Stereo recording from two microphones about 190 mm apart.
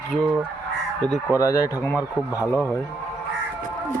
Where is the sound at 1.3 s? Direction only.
15° left (ahead or behind).